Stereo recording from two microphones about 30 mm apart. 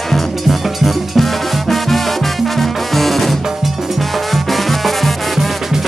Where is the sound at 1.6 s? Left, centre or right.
Centre.